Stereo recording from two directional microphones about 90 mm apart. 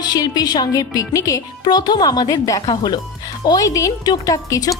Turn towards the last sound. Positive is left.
turn(degrees=40)  # may be behind; listen again after turning